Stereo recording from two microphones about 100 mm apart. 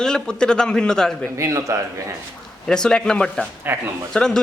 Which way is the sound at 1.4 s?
30° right (ahead or behind).